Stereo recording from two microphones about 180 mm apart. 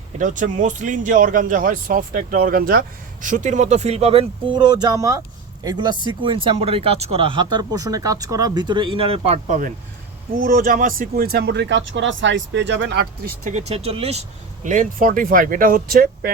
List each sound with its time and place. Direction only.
0.2 s speech: 45° right (ahead or behind); by 13.3 s 70° right (ahead or behind)
13.4 s speech: 40° right (ahead or behind); by 16.3 s 55° right (ahead or behind)